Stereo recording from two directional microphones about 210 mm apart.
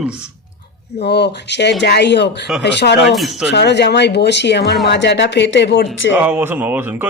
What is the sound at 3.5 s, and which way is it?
Speech, 55° left (ahead or behind).